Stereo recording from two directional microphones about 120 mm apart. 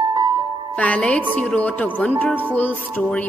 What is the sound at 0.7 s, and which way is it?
Music, 10° left (ahead or behind).